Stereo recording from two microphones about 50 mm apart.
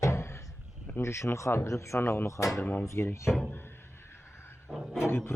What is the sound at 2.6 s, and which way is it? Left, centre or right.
Speech, left.